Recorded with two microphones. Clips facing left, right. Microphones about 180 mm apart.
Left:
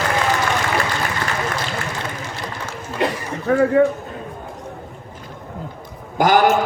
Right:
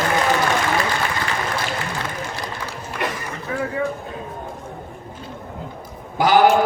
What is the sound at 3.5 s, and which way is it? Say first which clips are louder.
Speech: left 10 dB; 60° left (ahead or behind).